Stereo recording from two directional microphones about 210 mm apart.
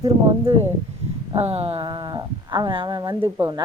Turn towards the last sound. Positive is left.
turn(degrees=-20)  # may be behind; listen again after turning